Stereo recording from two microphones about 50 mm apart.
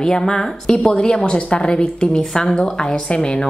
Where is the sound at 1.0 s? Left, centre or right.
Centre.